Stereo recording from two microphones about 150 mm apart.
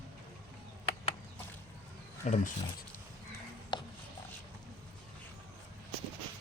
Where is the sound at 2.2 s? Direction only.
55° left (ahead or behind).